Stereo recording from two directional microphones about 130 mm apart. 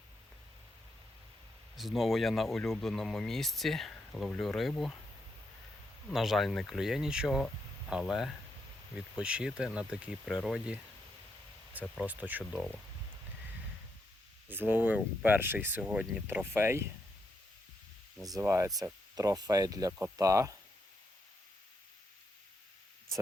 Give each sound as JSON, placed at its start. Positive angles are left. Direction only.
{"t": 1.7, "sound": "speech", "side_deg": 0}
{"t": 6.1, "sound": "speech", "side_deg": 0}
{"t": 12.0, "sound": "speech", "side_deg": -15}
{"t": 14.4, "sound": "speech", "side_deg": -15}
{"t": 18.2, "sound": "speech", "side_deg": -25}